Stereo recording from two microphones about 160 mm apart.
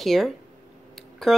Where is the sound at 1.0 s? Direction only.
Centre (ahead or behind).